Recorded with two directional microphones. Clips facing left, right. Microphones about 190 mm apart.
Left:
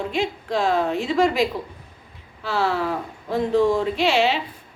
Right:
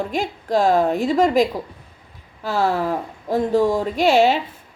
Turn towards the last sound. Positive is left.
turn(degrees=-45)  # may be behind; listen again after turning